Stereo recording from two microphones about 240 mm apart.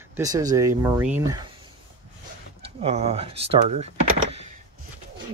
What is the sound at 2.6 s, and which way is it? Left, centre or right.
Speech, right.